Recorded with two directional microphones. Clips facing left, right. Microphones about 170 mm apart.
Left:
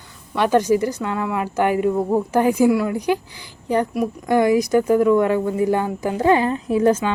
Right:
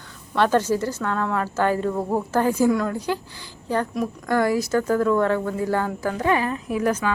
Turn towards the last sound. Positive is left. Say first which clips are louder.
# left 6 dB
turn(degrees=25)  # may be behind; listen again after turning